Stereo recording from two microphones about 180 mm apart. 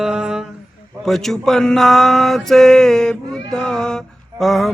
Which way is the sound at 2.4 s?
Centre (ahead or behind).